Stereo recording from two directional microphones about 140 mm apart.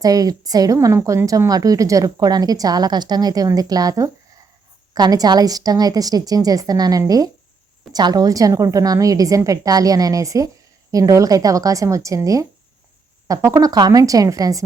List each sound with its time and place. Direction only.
0.0 s a woman's voice: 25° right (ahead or behind)